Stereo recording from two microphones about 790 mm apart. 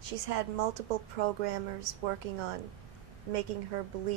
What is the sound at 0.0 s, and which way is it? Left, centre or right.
A woman's voice, right.